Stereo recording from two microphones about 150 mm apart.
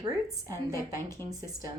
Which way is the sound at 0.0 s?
20° right (ahead or behind).